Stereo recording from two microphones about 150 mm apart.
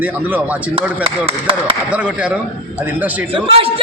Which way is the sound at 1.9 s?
10° right (ahead or behind).